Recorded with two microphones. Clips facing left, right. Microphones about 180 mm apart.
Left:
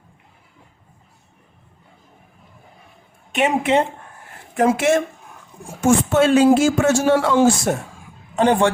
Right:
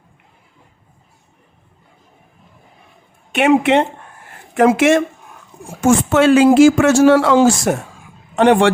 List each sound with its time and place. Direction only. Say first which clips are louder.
3.3 s speech: right 5 dB; 75° right (ahead or behind)
4.5 s a man's voice: right 4 dB; 90° right